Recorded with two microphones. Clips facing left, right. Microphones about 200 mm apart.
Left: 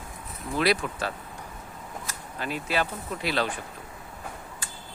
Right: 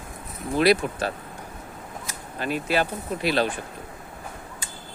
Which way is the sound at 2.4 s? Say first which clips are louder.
Right 5 dB; 55° right (ahead or behind).